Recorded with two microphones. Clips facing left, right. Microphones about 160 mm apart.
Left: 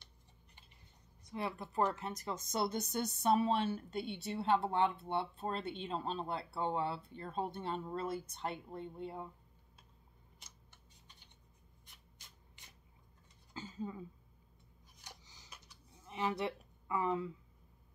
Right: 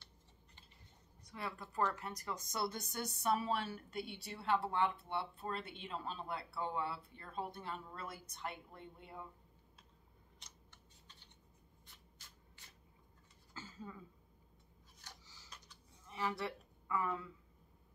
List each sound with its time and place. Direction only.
1.2 s a woman's voice: 20° left (ahead or behind)
11.8 s shuffling cards: 15° left (ahead or behind)
13.5 s a sound: 20° left (ahead or behind)